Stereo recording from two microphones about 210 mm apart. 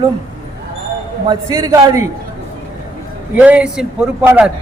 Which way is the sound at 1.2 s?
15° right (ahead or behind).